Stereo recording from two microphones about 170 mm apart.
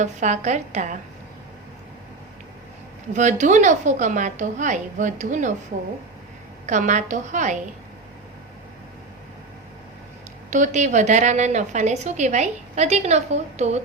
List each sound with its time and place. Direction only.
0.0 s a woman's voice: 45° right (ahead or behind)
3.1 s a woman's voice: 45° right (ahead or behind)
6.7 s a woman's voice: 45° right (ahead or behind)
10.5 s a woman's voice: 45° right (ahead or behind)